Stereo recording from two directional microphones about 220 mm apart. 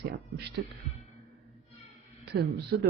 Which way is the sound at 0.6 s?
50° right (ahead or behind).